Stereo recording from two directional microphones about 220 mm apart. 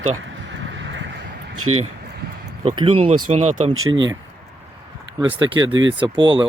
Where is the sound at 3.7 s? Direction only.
65° right (ahead or behind).